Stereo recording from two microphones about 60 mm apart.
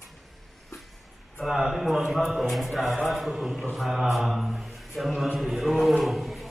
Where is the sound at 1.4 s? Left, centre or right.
Centre.